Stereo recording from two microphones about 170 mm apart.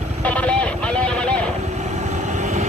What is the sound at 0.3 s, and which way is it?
Music, 10° left (ahead or behind).